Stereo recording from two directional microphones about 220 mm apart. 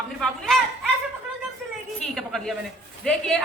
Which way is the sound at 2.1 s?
Centre (ahead or behind).